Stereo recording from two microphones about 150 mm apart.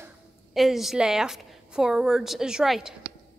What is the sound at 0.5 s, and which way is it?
A woman's voice, centre (ahead or behind).